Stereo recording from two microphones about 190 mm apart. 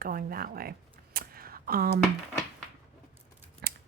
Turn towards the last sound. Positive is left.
turn(degrees=-60)  # may be behind; listen again after turning